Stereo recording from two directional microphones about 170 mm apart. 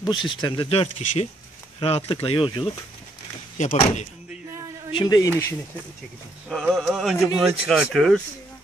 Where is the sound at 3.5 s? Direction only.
45° left (ahead or behind).